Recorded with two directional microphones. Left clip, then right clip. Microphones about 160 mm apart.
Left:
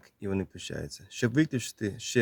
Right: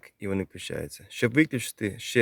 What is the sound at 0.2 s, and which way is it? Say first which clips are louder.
Speech: right 2 dB; 20° right (ahead or behind).